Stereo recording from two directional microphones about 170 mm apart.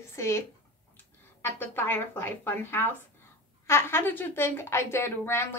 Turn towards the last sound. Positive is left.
turn(degrees=15)  # may be behind; listen again after turning